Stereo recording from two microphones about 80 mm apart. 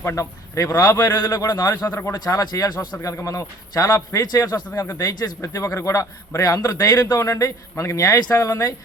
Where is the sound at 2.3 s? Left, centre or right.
Left.